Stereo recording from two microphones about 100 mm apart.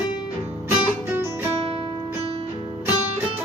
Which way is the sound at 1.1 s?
25° right (ahead or behind).